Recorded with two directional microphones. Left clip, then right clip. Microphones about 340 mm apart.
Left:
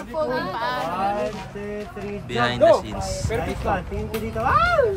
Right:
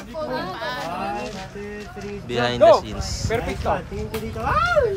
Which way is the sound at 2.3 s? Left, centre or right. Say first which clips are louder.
Right 2 dB; centre.